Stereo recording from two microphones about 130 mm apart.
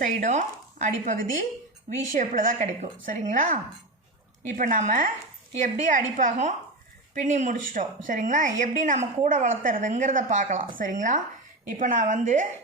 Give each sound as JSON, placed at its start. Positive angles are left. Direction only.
{"t": 0.0, "sound": "speech", "side_deg": -75}
{"t": 2.1, "sound": "a woman's voice", "side_deg": -80}
{"t": 11.8, "sound": "speech", "side_deg": -85}